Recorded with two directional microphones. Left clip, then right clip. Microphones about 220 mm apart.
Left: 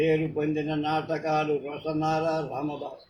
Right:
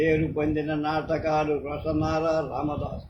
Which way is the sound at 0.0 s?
15° right (ahead or behind).